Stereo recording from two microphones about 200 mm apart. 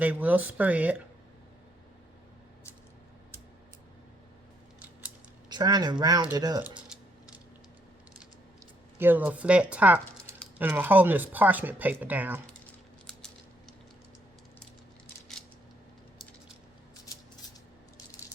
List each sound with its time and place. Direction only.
0.0 s speech: 10° right (ahead or behind)
5.5 s speech: 20° right (ahead or behind)
6.8 s mechanisms: 5° right (ahead or behind)
9.0 s speech: 10° right (ahead or behind)
15.0 s a sound: 5° left (ahead or behind)